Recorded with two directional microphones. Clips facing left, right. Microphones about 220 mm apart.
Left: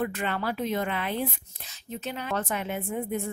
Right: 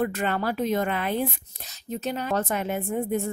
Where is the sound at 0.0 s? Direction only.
40° right (ahead or behind).